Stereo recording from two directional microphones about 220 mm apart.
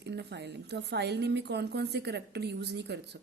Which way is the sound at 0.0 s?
50° right (ahead or behind).